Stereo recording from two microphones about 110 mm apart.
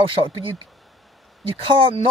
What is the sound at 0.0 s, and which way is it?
Speech, 50° right (ahead or behind).